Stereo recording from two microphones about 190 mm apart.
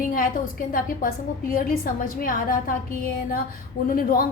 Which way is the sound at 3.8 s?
50° left (ahead or behind).